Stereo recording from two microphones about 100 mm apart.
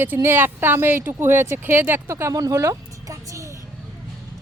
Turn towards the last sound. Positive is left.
turn(degrees=-35)  # may be behind; listen again after turning